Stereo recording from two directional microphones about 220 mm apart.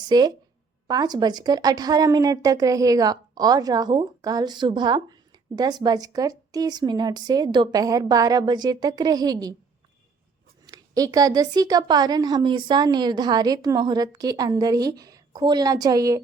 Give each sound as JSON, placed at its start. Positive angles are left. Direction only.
{"t": 0.1, "sound": "a woman's voice", "side_deg": -20}
{"t": 10.7, "sound": "a woman's voice", "side_deg": -15}